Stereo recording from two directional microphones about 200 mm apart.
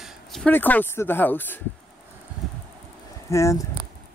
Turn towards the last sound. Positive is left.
turn(degrees=15)  # may be behind; listen again after turning